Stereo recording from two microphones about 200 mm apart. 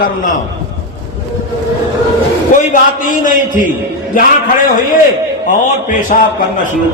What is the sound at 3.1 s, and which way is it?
A man's voice, 40° left (ahead or behind).